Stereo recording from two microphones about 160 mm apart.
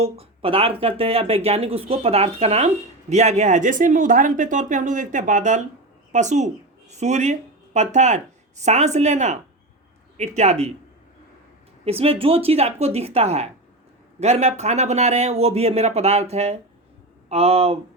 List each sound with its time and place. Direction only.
0.0 s a woman's voice: 35° right (ahead or behind)
11.9 s speech: 40° right (ahead or behind)